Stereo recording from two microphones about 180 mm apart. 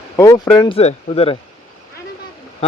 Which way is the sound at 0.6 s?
30° left (ahead or behind).